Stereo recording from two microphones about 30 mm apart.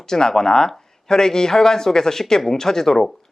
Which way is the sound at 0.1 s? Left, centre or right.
Centre.